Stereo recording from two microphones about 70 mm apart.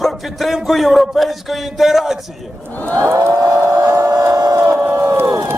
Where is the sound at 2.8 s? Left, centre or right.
Centre.